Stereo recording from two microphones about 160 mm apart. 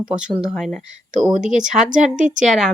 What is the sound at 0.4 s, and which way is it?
Speech, centre (ahead or behind).